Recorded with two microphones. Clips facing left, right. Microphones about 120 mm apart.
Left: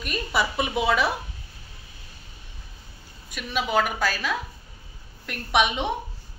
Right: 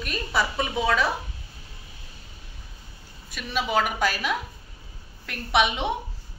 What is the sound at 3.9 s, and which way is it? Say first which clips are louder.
Speech: right 1 dB; 10° right (ahead or behind).